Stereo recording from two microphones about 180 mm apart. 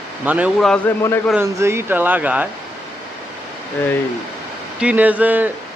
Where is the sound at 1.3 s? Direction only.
15° right (ahead or behind).